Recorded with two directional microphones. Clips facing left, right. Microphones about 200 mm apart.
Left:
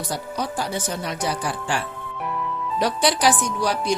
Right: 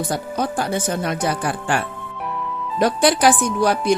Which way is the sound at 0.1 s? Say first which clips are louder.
Right 4 dB; 50° right (ahead or behind).